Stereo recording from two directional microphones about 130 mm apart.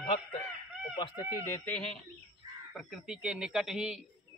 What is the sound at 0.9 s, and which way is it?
Speech, 35° left (ahead or behind).